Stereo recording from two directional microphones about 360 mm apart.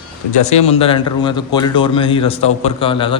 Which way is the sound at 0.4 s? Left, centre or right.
Centre.